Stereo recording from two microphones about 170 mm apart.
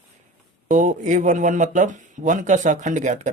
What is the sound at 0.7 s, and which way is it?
Speech, 50° right (ahead or behind).